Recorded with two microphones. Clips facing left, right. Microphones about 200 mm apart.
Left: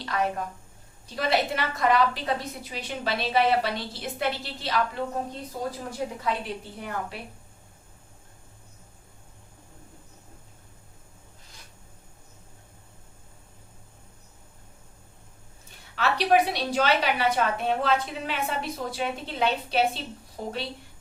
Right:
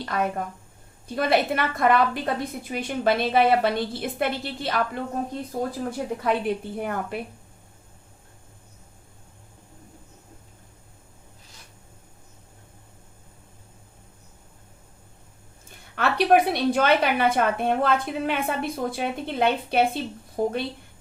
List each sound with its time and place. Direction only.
0.0 s a woman's voice: 50° right (ahead or behind)
6.2 s a woman's voice: 55° right (ahead or behind)
16.0 s a woman's voice: 55° right (ahead or behind)